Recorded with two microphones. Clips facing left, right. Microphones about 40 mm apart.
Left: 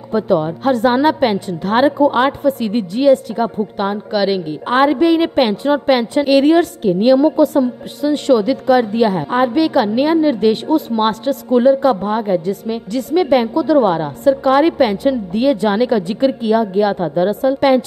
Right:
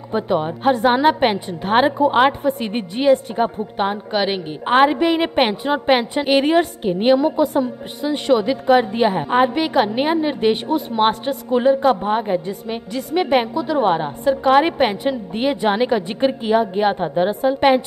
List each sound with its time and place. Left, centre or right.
0.1 s a woman's voice: centre